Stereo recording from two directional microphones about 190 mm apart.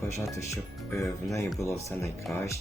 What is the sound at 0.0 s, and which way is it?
Speech, 15° left (ahead or behind).